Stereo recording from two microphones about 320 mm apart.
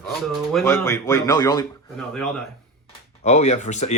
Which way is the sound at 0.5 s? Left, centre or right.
Centre.